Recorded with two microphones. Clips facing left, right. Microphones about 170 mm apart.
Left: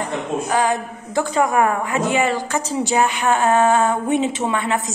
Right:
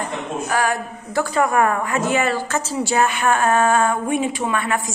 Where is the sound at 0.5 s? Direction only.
20° left (ahead or behind).